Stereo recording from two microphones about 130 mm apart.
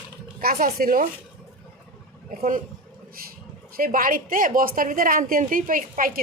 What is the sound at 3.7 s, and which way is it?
A woman's voice, 90° right.